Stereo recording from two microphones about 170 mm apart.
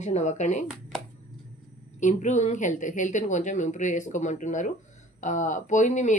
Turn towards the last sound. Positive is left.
turn(degrees=45)  # may be behind; listen again after turning